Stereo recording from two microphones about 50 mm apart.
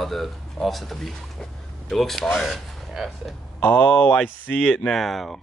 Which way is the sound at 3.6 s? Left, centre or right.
Left.